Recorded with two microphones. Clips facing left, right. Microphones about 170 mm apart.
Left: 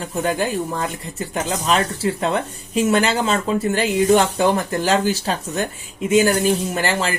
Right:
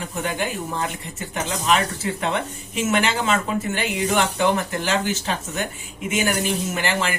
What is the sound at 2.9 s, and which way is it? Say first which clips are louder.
Speech: left 1 dB; 35° left (ahead or behind).